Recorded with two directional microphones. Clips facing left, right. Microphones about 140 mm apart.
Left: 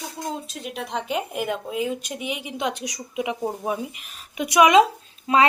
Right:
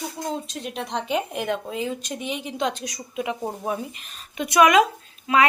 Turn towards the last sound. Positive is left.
turn(degrees=30)  # may be behind; listen again after turning